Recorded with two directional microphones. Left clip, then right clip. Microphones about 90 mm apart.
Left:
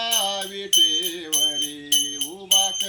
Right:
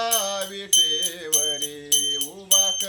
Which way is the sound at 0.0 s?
40° right (ahead or behind).